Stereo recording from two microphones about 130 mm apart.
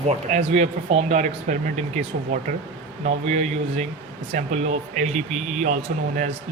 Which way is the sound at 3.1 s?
60° right (ahead or behind).